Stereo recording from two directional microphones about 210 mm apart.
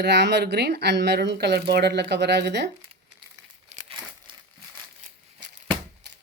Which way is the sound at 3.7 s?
35° right (ahead or behind).